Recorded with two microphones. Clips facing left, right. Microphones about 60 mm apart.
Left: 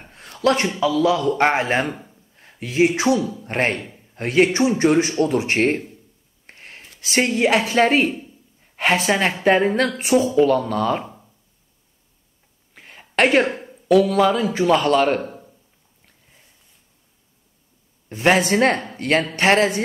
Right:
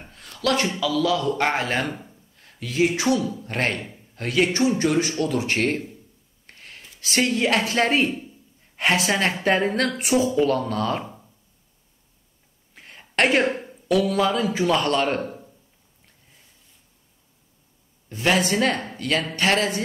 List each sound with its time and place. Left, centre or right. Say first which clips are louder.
0.1 s a man's voice: left 4 dB; left
6.4 s writing: left 3 dB; left
7.0 s a man's voice: left 2 dB; left
7.4 s a woman's voice: left 4 dB; centre
12.7 s a sound: left 3 dB; centre
13.7 s a man's voice: left 5 dB; centre
18.2 s a woman's voice: left 4 dB; left